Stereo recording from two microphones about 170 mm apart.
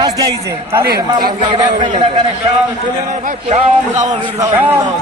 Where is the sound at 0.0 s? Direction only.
25° right (ahead or behind).